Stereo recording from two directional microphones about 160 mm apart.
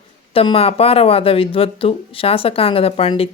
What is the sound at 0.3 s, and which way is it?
Speech, 35° left (ahead or behind).